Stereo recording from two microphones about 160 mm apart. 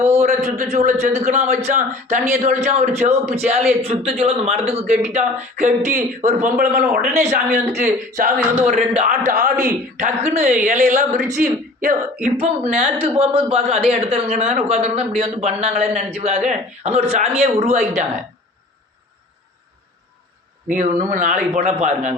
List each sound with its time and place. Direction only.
0.0 s speech: 45° right (ahead or behind)
13.1 s a man's voice: 35° right (ahead or behind)
20.7 s speech: 50° right (ahead or behind)